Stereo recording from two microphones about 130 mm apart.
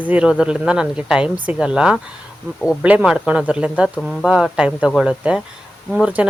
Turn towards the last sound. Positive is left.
turn(degrees=-10)  # may be behind; listen again after turning